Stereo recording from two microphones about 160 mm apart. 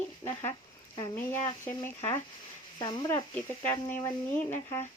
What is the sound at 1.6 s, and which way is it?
Speech, 15° left (ahead or behind).